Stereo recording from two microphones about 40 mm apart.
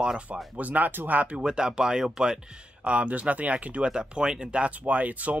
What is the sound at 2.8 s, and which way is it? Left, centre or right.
Speech, right.